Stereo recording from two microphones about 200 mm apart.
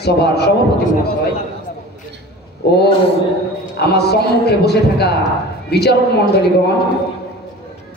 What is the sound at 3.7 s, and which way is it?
A man's voice, 55° left (ahead or behind).